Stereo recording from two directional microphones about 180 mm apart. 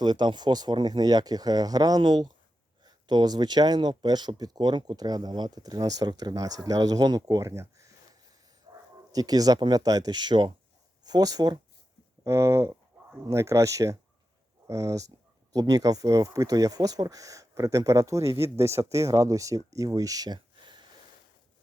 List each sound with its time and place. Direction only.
0.0 s speech: 25° right (ahead or behind)
8.7 s bow-wow: 20° right (ahead or behind)
9.1 s speech: 20° right (ahead or behind)